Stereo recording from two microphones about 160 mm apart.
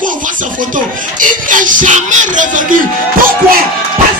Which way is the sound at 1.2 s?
55° right (ahead or behind).